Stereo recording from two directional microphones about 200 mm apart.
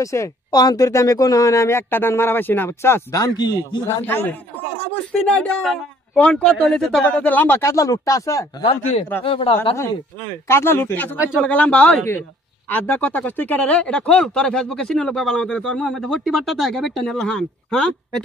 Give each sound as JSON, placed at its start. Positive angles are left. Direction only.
{"t": 0.0, "sound": "speech", "side_deg": 15}
{"t": 4.0, "sound": "speech", "side_deg": 10}
{"t": 5.4, "sound": "speech", "side_deg": 5}
{"t": 9.2, "sound": "speech", "side_deg": 30}
{"t": 10.5, "sound": "speech", "side_deg": 10}